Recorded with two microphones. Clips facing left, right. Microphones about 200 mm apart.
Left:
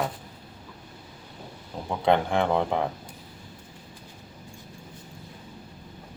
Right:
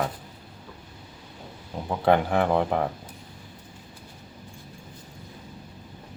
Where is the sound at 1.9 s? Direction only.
5° right (ahead or behind).